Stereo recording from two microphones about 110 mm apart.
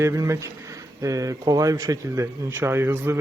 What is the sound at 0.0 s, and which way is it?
A man's voice, 25° right (ahead or behind).